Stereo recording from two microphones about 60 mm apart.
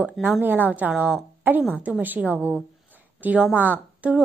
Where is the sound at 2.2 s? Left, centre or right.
Right.